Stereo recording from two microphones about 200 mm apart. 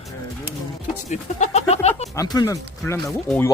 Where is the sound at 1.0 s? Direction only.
35° left (ahead or behind).